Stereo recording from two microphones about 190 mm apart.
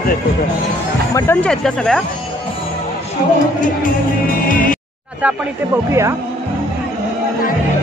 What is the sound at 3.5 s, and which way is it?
Music, 45° left (ahead or behind).